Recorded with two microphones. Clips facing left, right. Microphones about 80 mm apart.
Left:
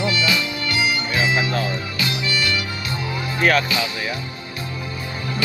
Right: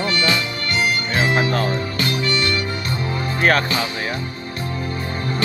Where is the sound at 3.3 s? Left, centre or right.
Right.